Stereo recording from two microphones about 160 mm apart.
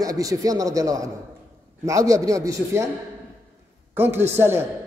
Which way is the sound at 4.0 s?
15° right (ahead or behind).